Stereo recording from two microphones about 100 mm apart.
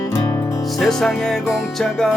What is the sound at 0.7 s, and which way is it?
Music, 5° left (ahead or behind).